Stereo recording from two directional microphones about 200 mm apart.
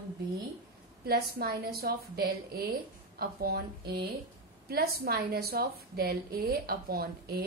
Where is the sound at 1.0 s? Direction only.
50° right (ahead or behind).